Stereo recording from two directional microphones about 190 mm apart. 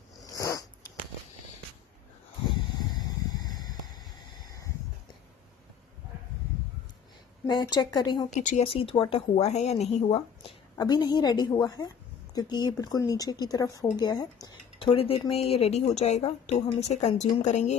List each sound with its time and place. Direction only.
2.9 s a sound: 20° left (ahead or behind)
7.4 s speech: 20° left (ahead or behind)
8.4 s speech: 35° left (ahead or behind)
10.8 s speech: 20° left (ahead or behind); by 17.7 s 40° left (ahead or behind)